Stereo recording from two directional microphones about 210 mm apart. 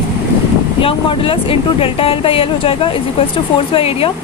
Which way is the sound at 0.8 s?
25° left (ahead or behind).